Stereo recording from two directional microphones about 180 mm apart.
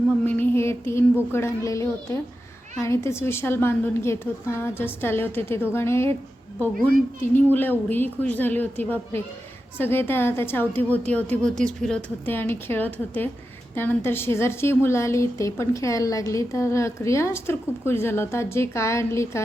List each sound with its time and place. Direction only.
0.3 s a woman's voice: 10° left (ahead or behind)
7.2 s a woman's voice: 10° left (ahead or behind)